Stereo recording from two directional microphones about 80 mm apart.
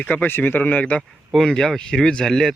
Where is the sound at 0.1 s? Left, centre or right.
Left.